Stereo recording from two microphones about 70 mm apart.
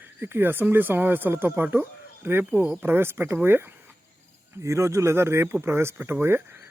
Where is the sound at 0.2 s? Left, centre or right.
Right.